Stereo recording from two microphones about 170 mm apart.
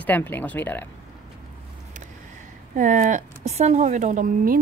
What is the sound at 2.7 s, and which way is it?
Speech, 50° right (ahead or behind).